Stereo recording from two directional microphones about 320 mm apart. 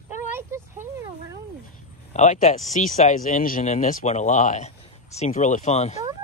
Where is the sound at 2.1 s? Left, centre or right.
Left.